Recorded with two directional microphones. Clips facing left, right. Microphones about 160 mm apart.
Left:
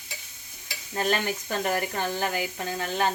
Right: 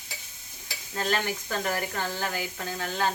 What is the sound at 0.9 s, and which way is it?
Stir, 20° left (ahead or behind).